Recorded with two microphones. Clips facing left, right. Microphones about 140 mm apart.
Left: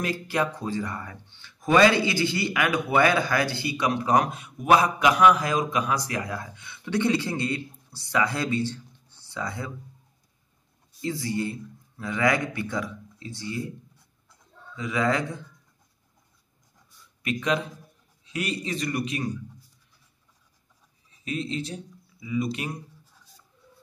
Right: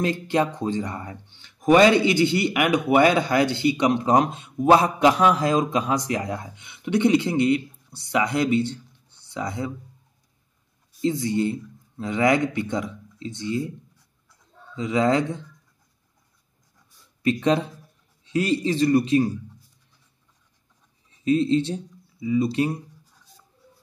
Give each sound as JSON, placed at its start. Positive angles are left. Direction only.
{"t": 0.0, "sound": "speech", "side_deg": -25}
{"t": 11.0, "sound": "speech", "side_deg": -20}
{"t": 14.8, "sound": "speech", "side_deg": -25}
{"t": 17.2, "sound": "speech", "side_deg": -30}
{"t": 21.2, "sound": "speech", "side_deg": -30}